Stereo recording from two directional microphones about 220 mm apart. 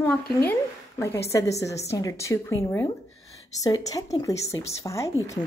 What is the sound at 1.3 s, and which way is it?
A woman's voice, 15° left (ahead or behind).